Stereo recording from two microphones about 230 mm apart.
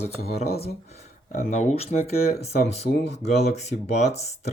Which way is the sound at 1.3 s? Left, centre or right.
Left.